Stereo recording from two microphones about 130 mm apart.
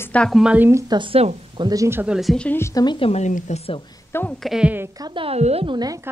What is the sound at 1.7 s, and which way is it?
Speech, 20° right (ahead or behind).